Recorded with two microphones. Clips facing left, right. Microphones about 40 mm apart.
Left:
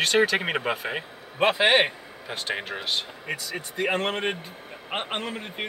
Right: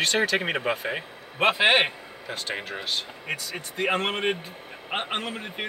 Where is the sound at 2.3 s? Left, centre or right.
Left.